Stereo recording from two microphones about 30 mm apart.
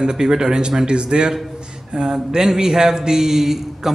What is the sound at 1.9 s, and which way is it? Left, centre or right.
A man's voice, right.